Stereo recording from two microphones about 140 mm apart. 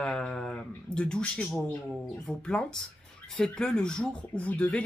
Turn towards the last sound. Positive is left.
turn(degrees=10)  # may be behind; listen again after turning